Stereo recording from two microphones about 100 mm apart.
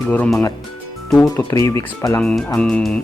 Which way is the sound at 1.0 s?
Centre (ahead or behind).